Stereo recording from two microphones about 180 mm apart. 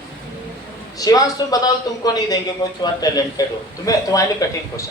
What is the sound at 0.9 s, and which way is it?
A man's voice, 20° left (ahead or behind).